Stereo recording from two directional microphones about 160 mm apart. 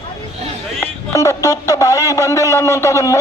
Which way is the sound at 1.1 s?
20° left (ahead or behind).